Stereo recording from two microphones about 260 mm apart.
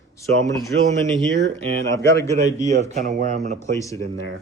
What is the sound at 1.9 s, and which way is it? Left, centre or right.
Speech, centre.